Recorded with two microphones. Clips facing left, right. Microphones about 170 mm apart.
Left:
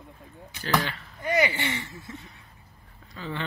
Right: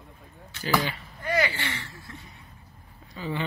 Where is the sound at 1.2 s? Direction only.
20° left (ahead or behind).